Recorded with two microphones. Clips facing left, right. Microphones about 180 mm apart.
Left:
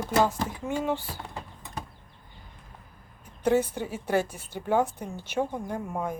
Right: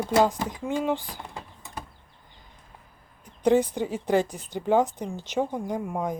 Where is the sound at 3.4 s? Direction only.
15° right (ahead or behind).